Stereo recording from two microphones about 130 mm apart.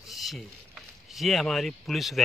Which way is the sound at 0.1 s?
Centre (ahead or behind).